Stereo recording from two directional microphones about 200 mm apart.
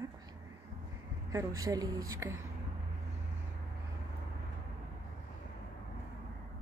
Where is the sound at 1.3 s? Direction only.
15° right (ahead or behind).